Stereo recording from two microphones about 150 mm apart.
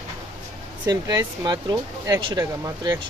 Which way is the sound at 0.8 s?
25° right (ahead or behind).